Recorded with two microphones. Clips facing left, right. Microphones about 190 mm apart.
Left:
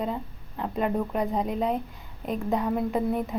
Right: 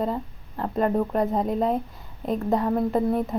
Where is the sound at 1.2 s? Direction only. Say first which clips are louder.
Right 3 dB; centre (ahead or behind).